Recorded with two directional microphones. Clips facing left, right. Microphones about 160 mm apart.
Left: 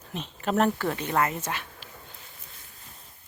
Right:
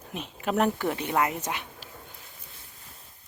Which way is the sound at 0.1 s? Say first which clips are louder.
Left 1 dB; 10° right (ahead or behind).